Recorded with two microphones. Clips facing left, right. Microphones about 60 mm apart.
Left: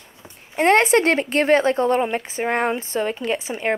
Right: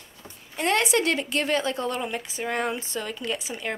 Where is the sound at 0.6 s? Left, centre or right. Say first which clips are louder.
Left 8 dB; left.